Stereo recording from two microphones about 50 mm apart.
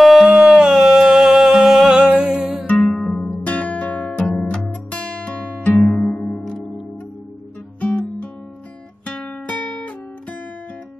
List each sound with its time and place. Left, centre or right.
0.0 s a sound: centre
0.3 s music: centre
2.9 s music: left
4.2 s music: centre
4.9 s music: left
7.8 s guitar: left